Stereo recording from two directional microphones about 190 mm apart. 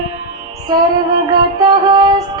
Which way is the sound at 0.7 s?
20° right (ahead or behind).